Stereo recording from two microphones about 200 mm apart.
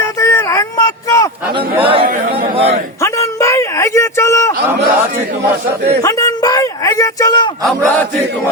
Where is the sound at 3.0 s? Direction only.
15° left (ahead or behind).